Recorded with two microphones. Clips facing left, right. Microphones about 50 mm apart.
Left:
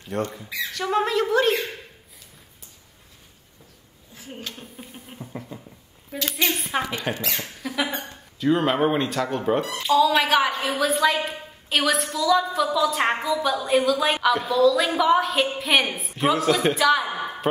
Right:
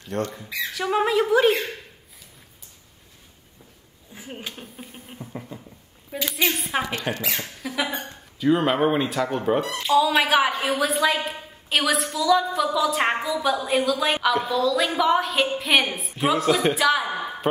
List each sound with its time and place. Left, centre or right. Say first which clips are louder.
0.1 s a woman's voice: even; centre
4.1 s speech: right 1 dB; right
4.7 s a sound: even; centre
6.3 s a woman's voice: right 1 dB; centre